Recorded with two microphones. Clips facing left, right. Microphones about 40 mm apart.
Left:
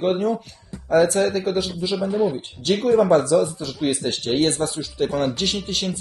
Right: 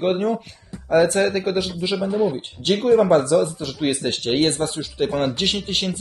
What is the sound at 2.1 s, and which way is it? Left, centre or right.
Speech, centre.